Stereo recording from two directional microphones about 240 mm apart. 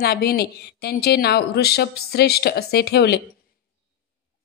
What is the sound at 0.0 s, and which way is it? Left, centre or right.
A woman's voice, left.